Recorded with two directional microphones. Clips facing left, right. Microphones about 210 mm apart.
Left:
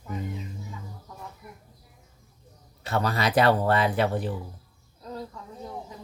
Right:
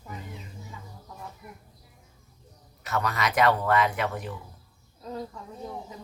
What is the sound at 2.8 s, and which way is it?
Speech, 30° left (ahead or behind).